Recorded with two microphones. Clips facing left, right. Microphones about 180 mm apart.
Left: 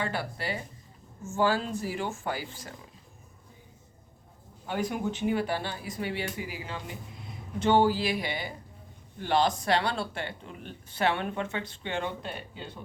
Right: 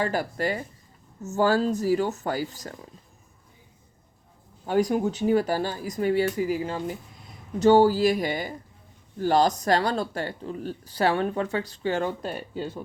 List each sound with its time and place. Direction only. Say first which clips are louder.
0.0 s speech: right 7 dB; 45° right (ahead or behind)
4.6 s speech: right 8 dB; 40° right (ahead or behind)